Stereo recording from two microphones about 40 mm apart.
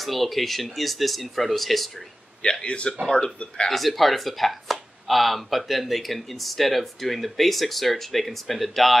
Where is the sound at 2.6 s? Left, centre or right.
Left.